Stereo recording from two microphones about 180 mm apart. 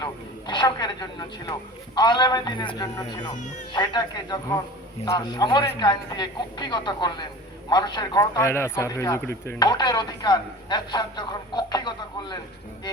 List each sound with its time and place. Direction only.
0.0 s a man's voice: 25° left (ahead or behind)
9.6 s speech: 25° left (ahead or behind)